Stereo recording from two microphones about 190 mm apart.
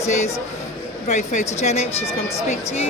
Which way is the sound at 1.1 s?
40° left (ahead or behind).